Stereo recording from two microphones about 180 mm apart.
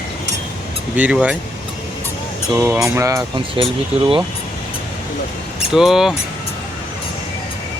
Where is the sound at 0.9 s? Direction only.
10° right (ahead or behind).